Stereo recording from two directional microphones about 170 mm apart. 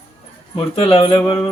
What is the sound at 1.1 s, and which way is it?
Speech, 20° left (ahead or behind).